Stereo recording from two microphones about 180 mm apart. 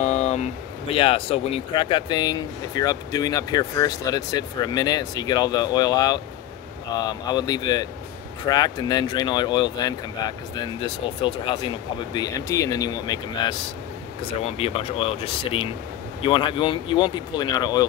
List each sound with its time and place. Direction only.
0.0 s a sound: 35° left (ahead or behind)
0.9 s speech: 30° left (ahead or behind)
14.4 s speech: 35° left (ahead or behind)